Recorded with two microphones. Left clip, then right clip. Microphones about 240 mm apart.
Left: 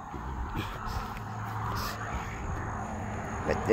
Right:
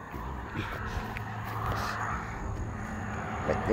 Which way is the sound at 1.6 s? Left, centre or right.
Left.